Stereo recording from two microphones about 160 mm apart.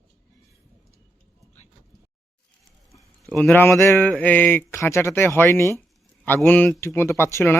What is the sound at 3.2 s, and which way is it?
Speech, 5° left (ahead or behind).